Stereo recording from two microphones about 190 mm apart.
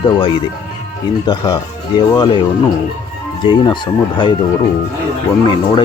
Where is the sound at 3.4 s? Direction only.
25° left (ahead or behind).